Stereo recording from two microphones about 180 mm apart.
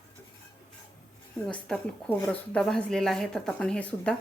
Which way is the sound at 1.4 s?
5° left (ahead or behind).